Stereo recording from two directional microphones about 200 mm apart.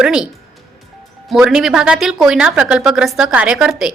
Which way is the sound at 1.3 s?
Centre (ahead or behind).